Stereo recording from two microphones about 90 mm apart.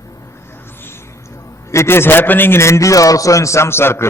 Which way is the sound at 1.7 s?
30° left (ahead or behind).